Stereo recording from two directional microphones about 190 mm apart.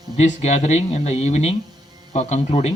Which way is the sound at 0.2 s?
35° left (ahead or behind).